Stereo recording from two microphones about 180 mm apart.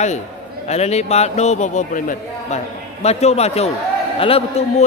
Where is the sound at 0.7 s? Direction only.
35° left (ahead or behind).